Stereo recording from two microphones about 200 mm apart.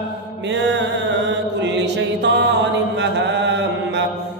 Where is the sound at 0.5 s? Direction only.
60° right (ahead or behind).